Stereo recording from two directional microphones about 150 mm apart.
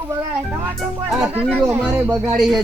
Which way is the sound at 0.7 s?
Centre (ahead or behind).